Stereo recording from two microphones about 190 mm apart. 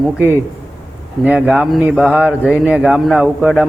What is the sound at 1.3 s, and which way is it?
A man's voice, 5° right (ahead or behind).